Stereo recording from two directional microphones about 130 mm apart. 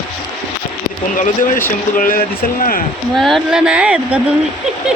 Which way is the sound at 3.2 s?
Centre (ahead or behind).